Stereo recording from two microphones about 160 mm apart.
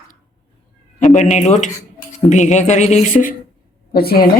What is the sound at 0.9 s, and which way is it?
Speech, 50° left (ahead or behind).